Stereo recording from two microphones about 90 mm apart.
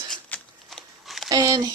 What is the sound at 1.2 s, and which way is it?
Speech, 40° right (ahead or behind).